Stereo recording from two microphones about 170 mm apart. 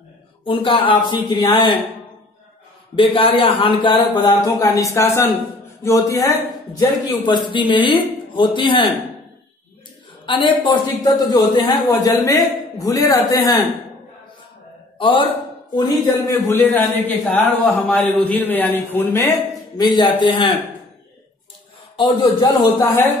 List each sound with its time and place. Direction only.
0.4 s a woman's voice: 30° left (ahead or behind)
3.0 s a man's voice: 30° left (ahead or behind)
10.2 s a man's voice: 30° left (ahead or behind)
15.0 s speech: 30° left (ahead or behind)
16.1 s a man's voice: 15° left (ahead or behind)
19.8 s a man's voice: 25° left (ahead or behind)
21.9 s a man's voice: 30° left (ahead or behind)